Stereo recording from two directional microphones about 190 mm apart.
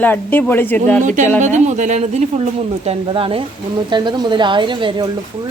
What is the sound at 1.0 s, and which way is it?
A woman's voice, 40° right (ahead or behind).